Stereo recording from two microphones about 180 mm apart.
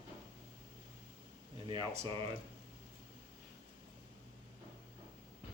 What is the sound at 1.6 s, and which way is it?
Speech, 25° right (ahead or behind).